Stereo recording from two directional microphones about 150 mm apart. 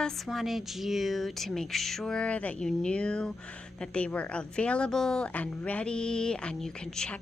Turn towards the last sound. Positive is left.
turn(degrees=5)  # may be behind; listen again after turning